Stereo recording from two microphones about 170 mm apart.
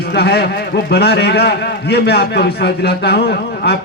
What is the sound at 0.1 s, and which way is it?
A man's voice, 75° left (ahead or behind).